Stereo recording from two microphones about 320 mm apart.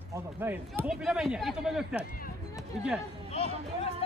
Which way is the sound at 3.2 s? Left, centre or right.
Centre.